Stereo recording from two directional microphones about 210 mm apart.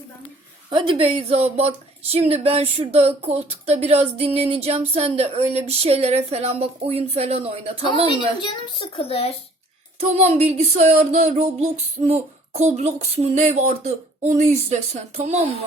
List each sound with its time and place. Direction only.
0.7 s speech: 25° right (ahead or behind)
8.4 s speech: 25° left (ahead or behind)
10.0 s a sound: 30° right (ahead or behind)